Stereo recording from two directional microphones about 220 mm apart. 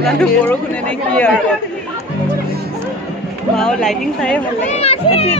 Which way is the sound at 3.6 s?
5° left (ahead or behind).